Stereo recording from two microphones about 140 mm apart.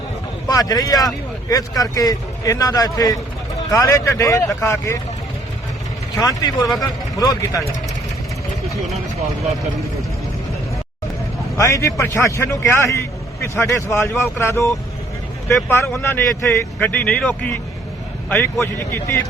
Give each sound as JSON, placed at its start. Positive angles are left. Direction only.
{"t": 0.4, "sound": "a man's voice", "side_deg": 25}
{"t": 6.1, "sound": "a man's voice", "side_deg": 25}
{"t": 11.5, "sound": "a man's voice", "side_deg": 20}
{"t": 15.7, "sound": "a man's voice", "side_deg": 20}